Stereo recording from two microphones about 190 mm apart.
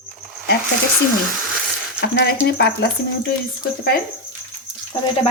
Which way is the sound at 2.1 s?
60° left (ahead or behind).